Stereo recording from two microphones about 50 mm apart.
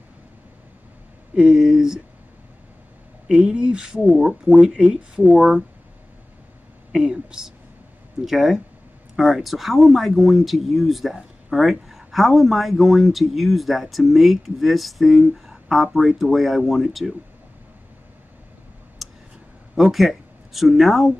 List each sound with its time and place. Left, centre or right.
1.3 s speech: centre
3.3 s speech: centre
6.9 s speech: centre
19.0 s a sound: centre
19.7 s speech: centre